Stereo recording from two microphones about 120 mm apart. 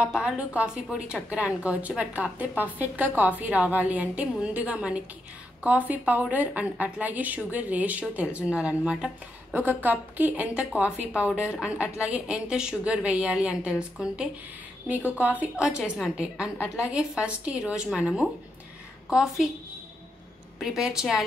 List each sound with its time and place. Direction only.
0.0 s a woman's voice: 10° right (ahead or behind)
16.5 s a woman's voice: 25° left (ahead or behind)
16.9 s a woman's voice: 10° right (ahead or behind)
20.5 s a woman's voice: 5° right (ahead or behind)